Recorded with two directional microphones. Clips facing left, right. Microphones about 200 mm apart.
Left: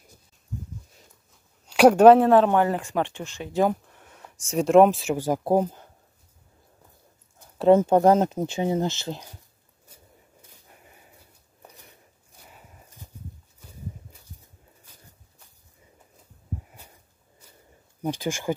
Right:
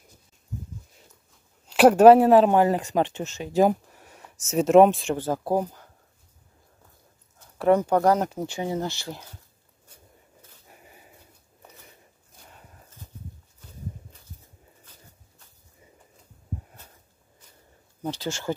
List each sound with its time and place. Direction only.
1.7 s speech: centre (ahead or behind); by 3.0 s 15° right (ahead or behind)
3.0 s speech: 40° right (ahead or behind)
3.3 s speech: 20° right (ahead or behind)
3.9 s speech: 10° right (ahead or behind); by 5.4 s 10° left (ahead or behind)
5.4 s speech: 20° left (ahead or behind)
7.3 s speech: 20° left (ahead or behind)
12.4 s a sound: 10° left (ahead or behind)
18.0 s speech: 15° left (ahead or behind)